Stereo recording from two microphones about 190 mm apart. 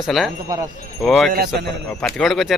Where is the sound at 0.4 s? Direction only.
20° right (ahead or behind).